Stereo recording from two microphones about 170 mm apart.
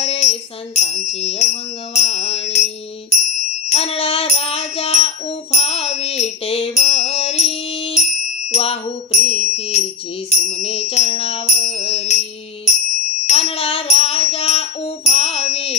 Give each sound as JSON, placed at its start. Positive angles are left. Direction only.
{"t": 0.0, "sound": "music", "side_deg": 40}
{"t": 13.3, "sound": "music", "side_deg": 35}